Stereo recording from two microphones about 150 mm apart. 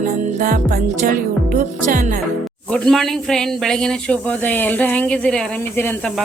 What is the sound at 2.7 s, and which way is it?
A man's voice, 5° left (ahead or behind).